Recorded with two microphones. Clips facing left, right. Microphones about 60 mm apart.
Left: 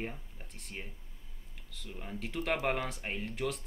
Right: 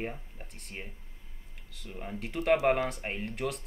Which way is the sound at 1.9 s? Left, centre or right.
Centre.